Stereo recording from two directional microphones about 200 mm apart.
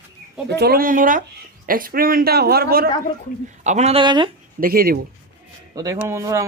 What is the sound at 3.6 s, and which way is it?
Speech, 35° right (ahead or behind).